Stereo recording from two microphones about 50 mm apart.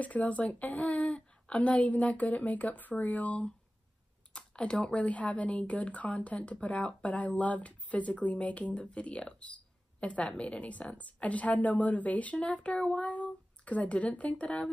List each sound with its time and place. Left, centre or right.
0.0 s speech: left
4.3 s computer keyboard: left
4.8 s speech: left
13.0 s speech: left